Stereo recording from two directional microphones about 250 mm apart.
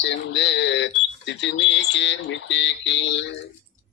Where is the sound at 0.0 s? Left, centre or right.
Left.